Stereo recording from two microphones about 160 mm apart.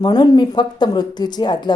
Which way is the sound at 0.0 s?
25° left (ahead or behind).